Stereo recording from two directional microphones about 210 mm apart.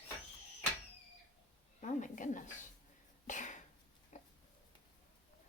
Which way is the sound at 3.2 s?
35° left (ahead or behind).